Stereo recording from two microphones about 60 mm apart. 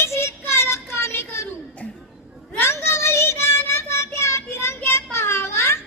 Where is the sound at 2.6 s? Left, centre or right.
Left.